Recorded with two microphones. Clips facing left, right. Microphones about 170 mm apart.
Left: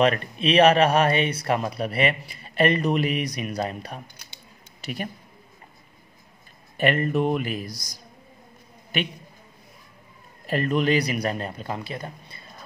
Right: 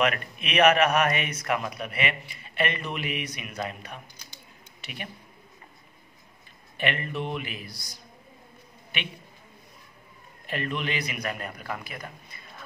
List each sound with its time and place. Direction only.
0.0 s speech: 30° left (ahead or behind)
6.8 s speech: 40° left (ahead or behind)
10.4 s speech: 40° left (ahead or behind)